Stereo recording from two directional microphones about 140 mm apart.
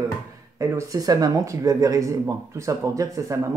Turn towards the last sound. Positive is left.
turn(degrees=-25)  # may be behind; listen again after turning